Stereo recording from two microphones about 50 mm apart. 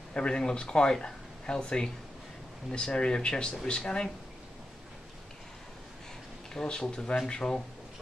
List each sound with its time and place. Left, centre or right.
0.1 s speech: centre
6.5 s speech: centre